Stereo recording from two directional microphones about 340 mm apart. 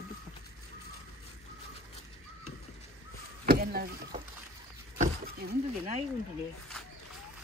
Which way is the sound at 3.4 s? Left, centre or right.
Right.